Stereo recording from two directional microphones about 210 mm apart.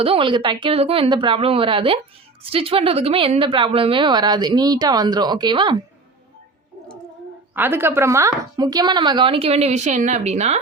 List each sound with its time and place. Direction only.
0.0 s a woman's voice: 25° right (ahead or behind)
7.5 s a woman's voice: 10° right (ahead or behind); by 10.6 s 30° right (ahead or behind)